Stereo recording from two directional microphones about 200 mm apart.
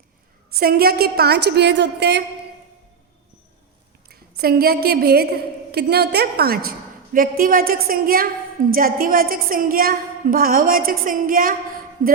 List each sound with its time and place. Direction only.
0.5 s a woman's voice: 50° right (ahead or behind)
4.1 s a woman's voice: 50° right (ahead or behind)